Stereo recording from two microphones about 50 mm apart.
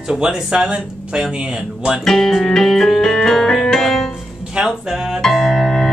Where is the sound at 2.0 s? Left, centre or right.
Centre.